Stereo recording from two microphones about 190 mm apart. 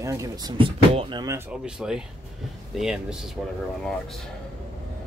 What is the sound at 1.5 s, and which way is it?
Speech, 5° right (ahead or behind).